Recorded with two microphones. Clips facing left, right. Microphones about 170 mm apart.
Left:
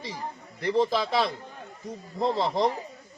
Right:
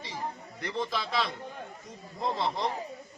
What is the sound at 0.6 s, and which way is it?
A man's voice, 35° left (ahead or behind).